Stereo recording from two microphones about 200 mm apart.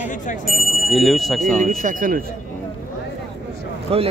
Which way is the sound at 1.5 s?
40° right (ahead or behind).